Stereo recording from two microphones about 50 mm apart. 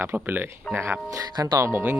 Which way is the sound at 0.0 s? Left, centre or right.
Right.